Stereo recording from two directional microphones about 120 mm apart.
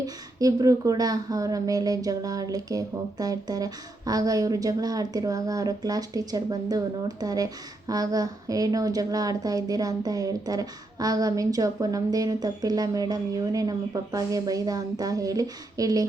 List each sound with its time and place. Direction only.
0.0 s speech: 30° right (ahead or behind)